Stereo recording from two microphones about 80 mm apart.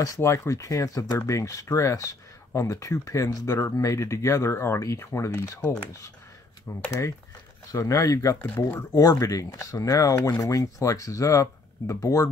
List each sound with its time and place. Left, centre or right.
0.0 s speech: left
7.7 s speech: left